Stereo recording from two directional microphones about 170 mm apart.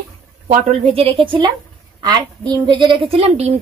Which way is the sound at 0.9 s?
30° right (ahead or behind).